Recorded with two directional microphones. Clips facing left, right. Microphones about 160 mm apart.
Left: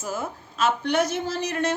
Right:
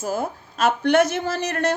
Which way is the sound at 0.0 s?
35° right (ahead or behind).